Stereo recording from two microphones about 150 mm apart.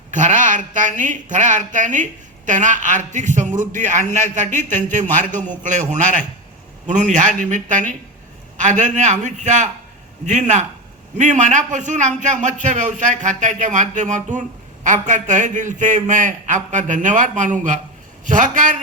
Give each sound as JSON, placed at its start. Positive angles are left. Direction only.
{"t": 0.1, "sound": "a man's voice", "side_deg": -55}